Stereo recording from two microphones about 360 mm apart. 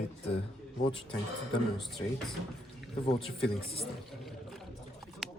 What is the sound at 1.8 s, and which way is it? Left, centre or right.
Speech, centre.